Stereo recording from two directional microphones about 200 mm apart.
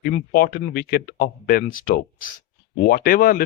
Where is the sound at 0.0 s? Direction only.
50° left (ahead or behind).